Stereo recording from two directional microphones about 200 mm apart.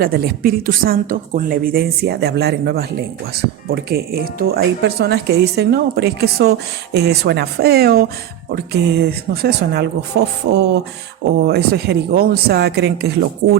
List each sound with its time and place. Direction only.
0.0 s speech: 50° right (ahead or behind)
11.4 s speech: 55° right (ahead or behind)